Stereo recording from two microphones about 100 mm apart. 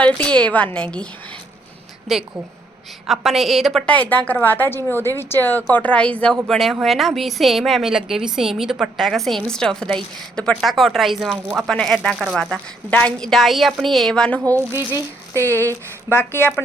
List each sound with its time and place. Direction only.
0.0 s a woman's voice: 10° left (ahead or behind)
2.1 s a woman's voice: centre (ahead or behind)
3.8 s a woman's voice: 15° left (ahead or behind)
14.7 s speech: 25° right (ahead or behind)